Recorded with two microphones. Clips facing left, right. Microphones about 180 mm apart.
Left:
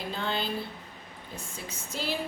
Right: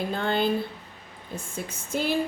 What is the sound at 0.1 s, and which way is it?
Speech, 55° right (ahead or behind).